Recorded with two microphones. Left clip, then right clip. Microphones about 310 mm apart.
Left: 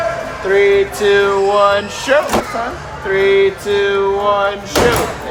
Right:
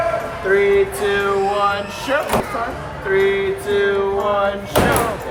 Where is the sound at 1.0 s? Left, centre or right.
Left.